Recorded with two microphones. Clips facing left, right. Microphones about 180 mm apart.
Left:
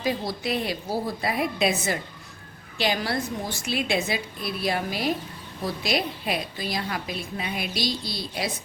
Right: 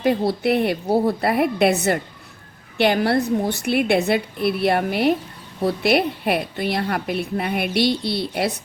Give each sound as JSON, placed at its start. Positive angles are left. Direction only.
{"t": 0.3, "sound": "a woman's voice", "side_deg": -60}